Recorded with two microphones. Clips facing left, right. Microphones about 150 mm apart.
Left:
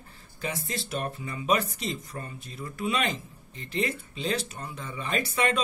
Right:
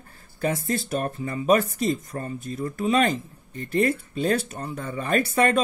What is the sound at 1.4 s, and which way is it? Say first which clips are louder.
Speech: right 7 dB; 50° right (ahead or behind).